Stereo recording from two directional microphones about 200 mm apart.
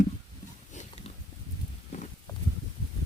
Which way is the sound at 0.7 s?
35° left (ahead or behind).